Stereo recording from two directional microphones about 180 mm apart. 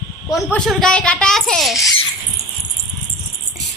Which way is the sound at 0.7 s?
5° left (ahead or behind).